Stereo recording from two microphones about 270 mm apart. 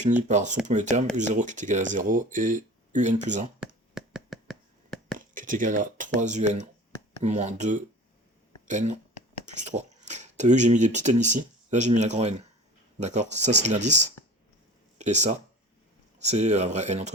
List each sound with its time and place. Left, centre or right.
0.0 s speech: right
3.6 s a sound: centre
5.1 s speech: right